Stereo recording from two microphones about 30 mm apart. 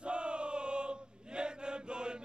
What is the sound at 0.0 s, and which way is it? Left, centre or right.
Chant, right.